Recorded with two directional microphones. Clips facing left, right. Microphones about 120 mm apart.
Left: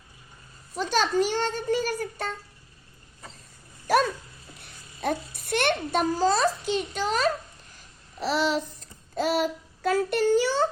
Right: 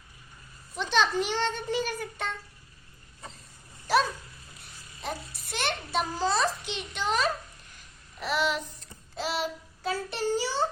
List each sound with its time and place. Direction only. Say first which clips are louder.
0.8 s a child's voice: left 3 dB; 40° left (ahead or behind)
3.8 s dog: left 3 dB; 50° left (ahead or behind)
4.9 s a child's voice: left 8 dB; 55° left (ahead or behind)
7.8 s child singing: left 6 dB; 35° left (ahead or behind); by 10.7 s 55° left (ahead or behind)